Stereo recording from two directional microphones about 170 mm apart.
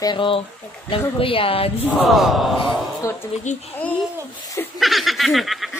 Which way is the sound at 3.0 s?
15° left (ahead or behind).